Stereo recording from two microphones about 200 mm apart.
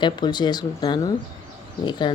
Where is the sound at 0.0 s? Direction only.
20° left (ahead or behind).